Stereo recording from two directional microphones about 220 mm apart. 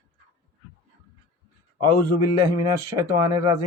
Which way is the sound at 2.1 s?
15° right (ahead or behind).